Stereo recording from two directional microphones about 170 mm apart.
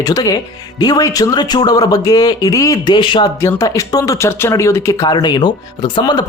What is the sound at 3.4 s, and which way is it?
Speech, 15° left (ahead or behind).